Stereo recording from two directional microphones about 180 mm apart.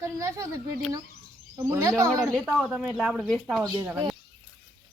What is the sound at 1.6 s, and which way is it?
Speech, 15° right (ahead or behind).